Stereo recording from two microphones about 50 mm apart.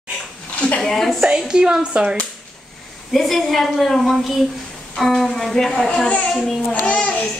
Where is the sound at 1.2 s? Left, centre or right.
Centre.